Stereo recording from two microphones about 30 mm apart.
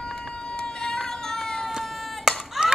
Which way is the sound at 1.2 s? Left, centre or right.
Centre.